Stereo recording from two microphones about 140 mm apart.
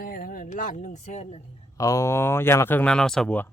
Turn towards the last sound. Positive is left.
turn(degrees=5)  # may be behind; listen again after turning